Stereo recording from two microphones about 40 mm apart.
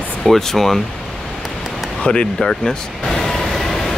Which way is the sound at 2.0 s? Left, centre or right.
Left.